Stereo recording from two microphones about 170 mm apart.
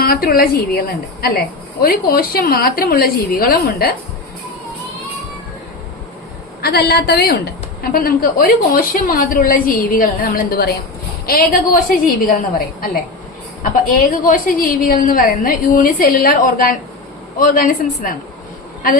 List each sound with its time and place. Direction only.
0.0 s a woman's voice: 60° left (ahead or behind)
6.6 s a woman's voice: 65° left (ahead or behind)